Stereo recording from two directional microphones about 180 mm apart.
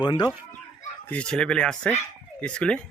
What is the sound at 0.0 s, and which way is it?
Speech, 25° left (ahead or behind).